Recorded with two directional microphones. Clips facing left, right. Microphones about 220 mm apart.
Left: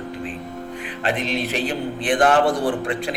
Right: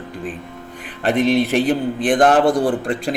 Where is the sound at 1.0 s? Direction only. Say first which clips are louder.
Right 8 dB; 55° right (ahead or behind).